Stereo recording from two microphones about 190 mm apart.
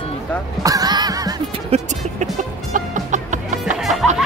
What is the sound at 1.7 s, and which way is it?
Music, 40° right (ahead or behind).